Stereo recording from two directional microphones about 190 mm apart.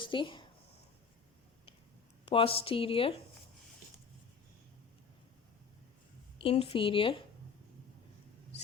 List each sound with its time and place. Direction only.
0.0 s speech: 25° left (ahead or behind)
2.2 s a woman's voice: 30° left (ahead or behind)
6.4 s a woman's voice: 30° left (ahead or behind)